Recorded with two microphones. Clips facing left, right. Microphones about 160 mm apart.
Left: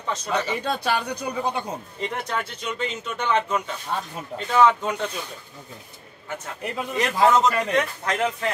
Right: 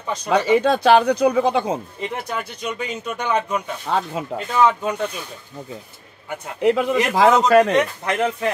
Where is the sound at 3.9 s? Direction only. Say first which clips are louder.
Right 7 dB; 90° right.